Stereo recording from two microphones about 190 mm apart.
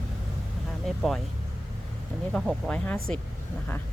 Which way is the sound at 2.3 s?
5° left (ahead or behind).